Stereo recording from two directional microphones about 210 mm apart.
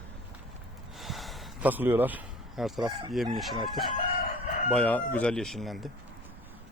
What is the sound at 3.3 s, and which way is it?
Speech, centre (ahead or behind).